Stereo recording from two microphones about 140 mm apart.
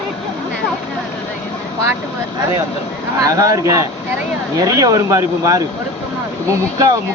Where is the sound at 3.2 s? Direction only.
25° right (ahead or behind).